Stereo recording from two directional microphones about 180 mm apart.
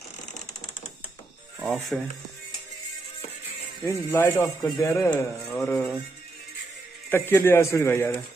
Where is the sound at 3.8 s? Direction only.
15° left (ahead or behind).